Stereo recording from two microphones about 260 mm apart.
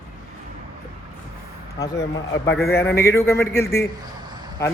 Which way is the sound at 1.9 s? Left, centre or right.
Left.